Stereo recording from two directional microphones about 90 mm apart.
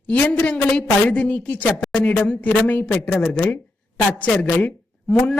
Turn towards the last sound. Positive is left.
turn(degrees=15)  # may be behind; listen again after turning